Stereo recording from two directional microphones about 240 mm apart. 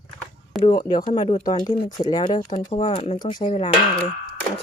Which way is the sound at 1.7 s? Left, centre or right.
Left.